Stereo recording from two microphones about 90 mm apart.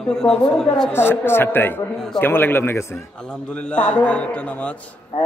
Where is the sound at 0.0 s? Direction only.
5° left (ahead or behind).